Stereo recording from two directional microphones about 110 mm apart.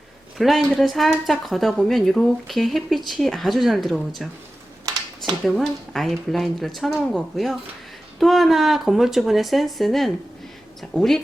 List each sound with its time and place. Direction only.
0.3 s speech: centre (ahead or behind)
5.4 s speech: 5° left (ahead or behind)